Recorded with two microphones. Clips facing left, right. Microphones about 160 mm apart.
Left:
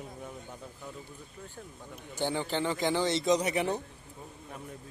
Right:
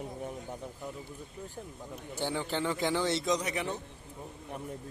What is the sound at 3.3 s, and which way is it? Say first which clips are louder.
Speech: left 4 dB; 30° left (ahead or behind).